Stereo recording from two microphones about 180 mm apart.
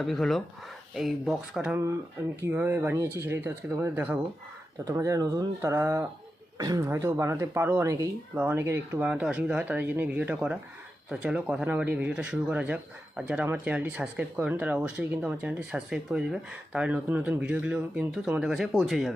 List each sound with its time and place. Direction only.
0.0 s speech: centre (ahead or behind)